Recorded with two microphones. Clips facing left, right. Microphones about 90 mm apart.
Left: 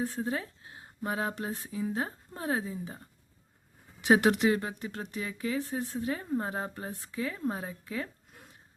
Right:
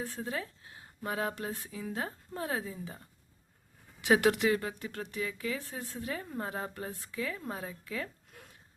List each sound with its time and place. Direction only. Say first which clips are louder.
0.0 s speech: left 4 dB; 30° left (ahead or behind)
4.0 s speech: left 2 dB; 25° left (ahead or behind)